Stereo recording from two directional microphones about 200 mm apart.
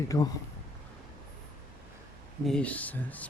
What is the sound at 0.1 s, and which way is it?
Speech, 15° left (ahead or behind).